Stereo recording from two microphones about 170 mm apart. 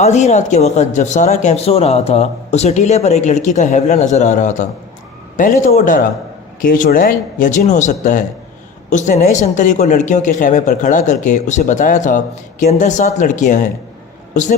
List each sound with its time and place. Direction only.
0.0 s speech: 40° left (ahead or behind)